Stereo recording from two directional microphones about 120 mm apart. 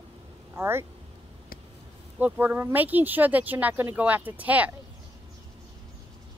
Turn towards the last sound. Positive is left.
turn(degrees=-15)  # may be behind; listen again after turning